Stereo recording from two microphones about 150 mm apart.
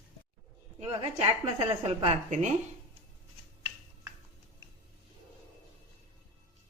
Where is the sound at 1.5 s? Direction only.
40° right (ahead or behind).